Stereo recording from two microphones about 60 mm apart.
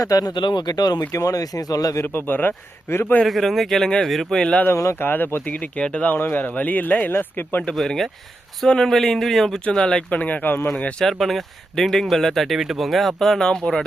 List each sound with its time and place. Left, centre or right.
0.0 s speech: left
1.1 s speech: left
2.1 s speech: left
3.2 s speech: centre
4.4 s speech: centre
4.7 s speech: left
5.0 s speech: left
5.7 s speech: centre
6.1 s speech: left
7.8 s speech: centre
9.6 s speech: centre
10.2 s speech: left
11.0 s speech: centre
13.6 s speech: centre